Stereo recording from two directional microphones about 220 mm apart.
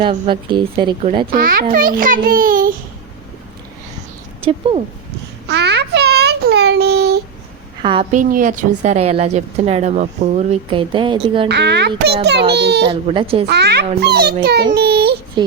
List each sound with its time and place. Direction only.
0.0 s a woman's voice: 20° right (ahead or behind)
1.3 s a child's voice: 40° right (ahead or behind)
4.4 s speech: 25° right (ahead or behind)
5.5 s child singing: 50° right (ahead or behind)
7.8 s a woman's voice: 25° right (ahead or behind)
8.1 s a woman's voice: 35° right (ahead or behind)
11.4 s a child's voice: 50° right (ahead or behind)
12.9 s a woman's voice: 25° right (ahead or behind)
13.5 s a child's voice: 50° right (ahead or behind)
14.8 s child singing: 45° right (ahead or behind)
15.4 s a woman's voice: 20° right (ahead or behind)